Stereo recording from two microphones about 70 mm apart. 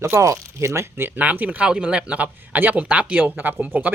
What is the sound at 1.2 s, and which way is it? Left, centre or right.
Speech, right.